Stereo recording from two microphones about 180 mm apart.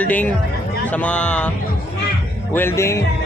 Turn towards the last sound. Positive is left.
turn(degrees=15)  # may be behind; listen again after turning